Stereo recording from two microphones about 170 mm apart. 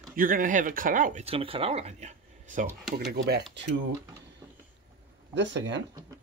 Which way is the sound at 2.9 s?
70° right (ahead or behind).